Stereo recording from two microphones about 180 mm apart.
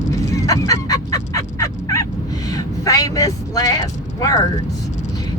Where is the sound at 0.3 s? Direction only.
20° left (ahead or behind).